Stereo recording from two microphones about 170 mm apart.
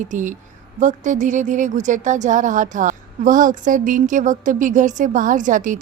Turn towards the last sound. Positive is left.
turn(degrees=-50)  # may be behind; listen again after turning